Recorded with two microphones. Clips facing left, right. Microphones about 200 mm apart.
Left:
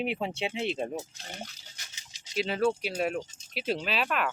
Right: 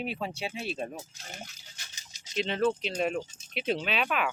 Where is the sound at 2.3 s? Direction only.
5° left (ahead or behind).